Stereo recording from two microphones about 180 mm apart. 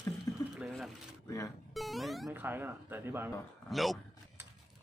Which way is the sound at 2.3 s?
10° right (ahead or behind).